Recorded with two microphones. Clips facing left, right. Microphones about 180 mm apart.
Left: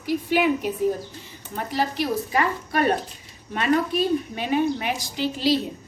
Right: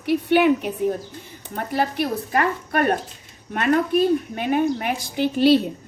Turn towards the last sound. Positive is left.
turn(degrees=-60)  # may be behind; listen again after turning